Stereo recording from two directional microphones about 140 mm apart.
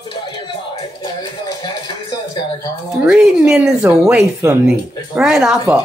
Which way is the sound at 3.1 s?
5° right (ahead or behind).